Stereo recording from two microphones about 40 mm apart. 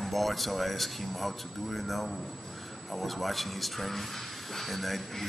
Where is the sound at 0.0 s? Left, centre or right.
Centre.